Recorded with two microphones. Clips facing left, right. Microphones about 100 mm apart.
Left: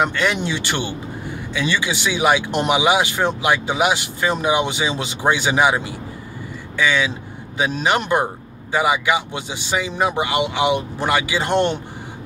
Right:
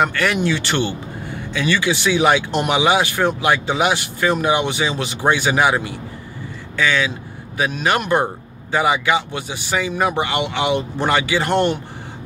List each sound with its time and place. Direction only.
0.0 s speech: 20° left (ahead or behind)